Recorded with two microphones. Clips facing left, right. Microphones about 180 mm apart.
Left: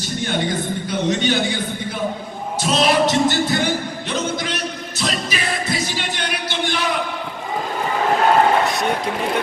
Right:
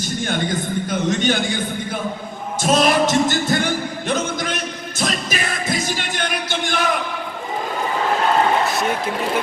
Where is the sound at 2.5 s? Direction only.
45° right (ahead or behind).